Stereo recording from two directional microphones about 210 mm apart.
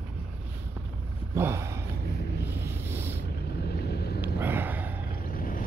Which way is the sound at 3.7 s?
50° left (ahead or behind).